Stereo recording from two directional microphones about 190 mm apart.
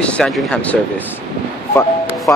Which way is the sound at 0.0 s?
5° left (ahead or behind).